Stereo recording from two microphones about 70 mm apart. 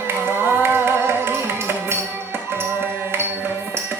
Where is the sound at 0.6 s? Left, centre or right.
Right.